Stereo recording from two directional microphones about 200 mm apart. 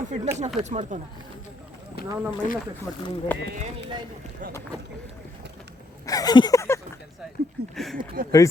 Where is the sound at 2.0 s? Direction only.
50° left (ahead or behind).